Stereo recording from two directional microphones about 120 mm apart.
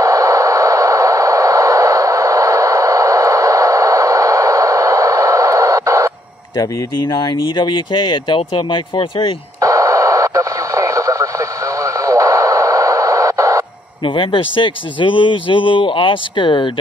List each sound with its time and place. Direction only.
0.0 s a sound: 25° right (ahead or behind)
6.5 s speech: 30° left (ahead or behind)
9.6 s radio: 25° right (ahead or behind)
14.0 s speech: 45° left (ahead or behind)